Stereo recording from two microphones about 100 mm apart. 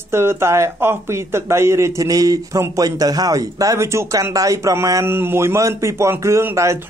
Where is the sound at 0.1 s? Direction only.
25° right (ahead or behind).